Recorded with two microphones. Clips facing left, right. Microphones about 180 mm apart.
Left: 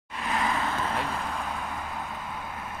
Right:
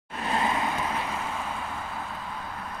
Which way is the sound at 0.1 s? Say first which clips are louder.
Right 1 dB; 30° right (ahead or behind).